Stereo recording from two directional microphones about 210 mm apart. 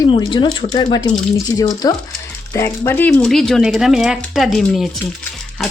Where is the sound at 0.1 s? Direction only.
25° left (ahead or behind).